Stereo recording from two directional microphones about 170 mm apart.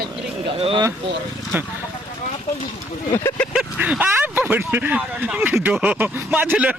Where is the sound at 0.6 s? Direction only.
30° right (ahead or behind).